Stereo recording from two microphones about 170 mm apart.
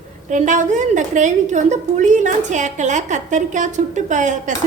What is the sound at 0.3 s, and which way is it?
A woman's voice, 45° right (ahead or behind).